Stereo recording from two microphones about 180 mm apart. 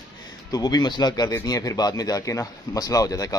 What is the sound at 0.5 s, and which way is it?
A man's voice, 20° left (ahead or behind).